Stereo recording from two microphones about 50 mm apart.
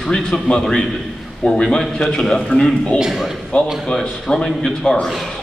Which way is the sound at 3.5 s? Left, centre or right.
Left.